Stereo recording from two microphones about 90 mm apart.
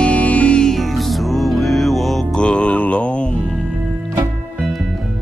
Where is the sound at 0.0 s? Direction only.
15° left (ahead or behind).